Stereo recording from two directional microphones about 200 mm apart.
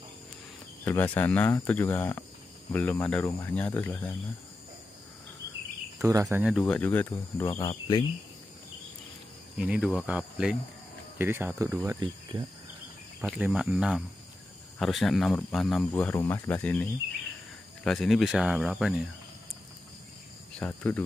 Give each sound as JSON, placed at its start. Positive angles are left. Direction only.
{"t": 0.8, "sound": "speech", "side_deg": 10}
{"t": 5.9, "sound": "speech", "side_deg": -15}
{"t": 6.6, "sound": "speech", "side_deg": 10}
{"t": 7.4, "sound": "speech", "side_deg": 25}
{"t": 9.6, "sound": "speech", "side_deg": -5}
{"t": 12.0, "sound": "speech", "side_deg": -25}
{"t": 13.2, "sound": "speech", "side_deg": -5}
{"t": 20.5, "sound": "cricket", "side_deg": 5}